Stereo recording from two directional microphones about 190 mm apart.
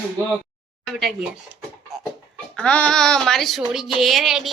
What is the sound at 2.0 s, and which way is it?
A child's voice, 5° left (ahead or behind).